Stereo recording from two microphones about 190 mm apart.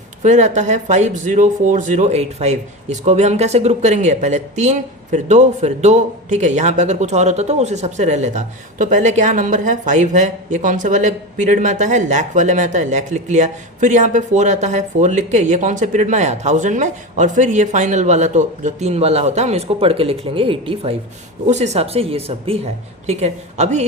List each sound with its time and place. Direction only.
0.2 s speech: 35° right (ahead or behind)